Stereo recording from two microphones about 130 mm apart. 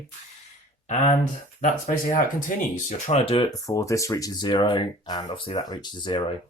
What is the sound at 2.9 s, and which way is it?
Speech, 55° left (ahead or behind).